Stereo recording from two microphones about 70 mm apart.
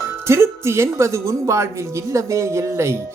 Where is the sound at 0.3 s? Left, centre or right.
Right.